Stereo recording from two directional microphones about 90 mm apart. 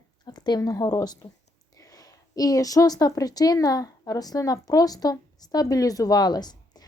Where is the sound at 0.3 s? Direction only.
50° left (ahead or behind).